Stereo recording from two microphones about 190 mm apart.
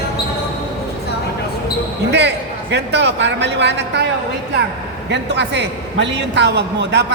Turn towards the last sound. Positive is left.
turn(degrees=-65)  # may be behind; listen again after turning